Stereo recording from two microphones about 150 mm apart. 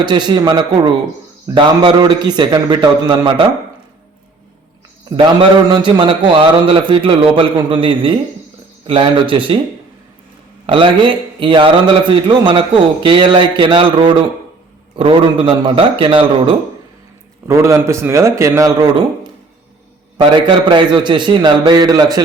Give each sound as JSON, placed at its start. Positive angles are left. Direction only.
{"t": 0.0, "sound": "a man's voice", "side_deg": -30}
{"t": 5.1, "sound": "a man's voice", "side_deg": -30}
{"t": 10.7, "sound": "a man's voice", "side_deg": -35}
{"t": 17.5, "sound": "a man's voice", "side_deg": -20}
{"t": 20.3, "sound": "a man's voice", "side_deg": -35}